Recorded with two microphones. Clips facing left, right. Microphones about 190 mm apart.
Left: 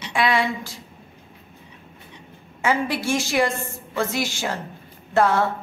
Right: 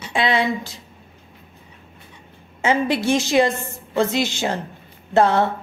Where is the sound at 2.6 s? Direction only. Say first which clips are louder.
Right 4 dB; 20° right (ahead or behind).